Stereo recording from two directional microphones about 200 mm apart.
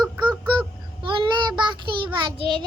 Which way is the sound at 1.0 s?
25° right (ahead or behind).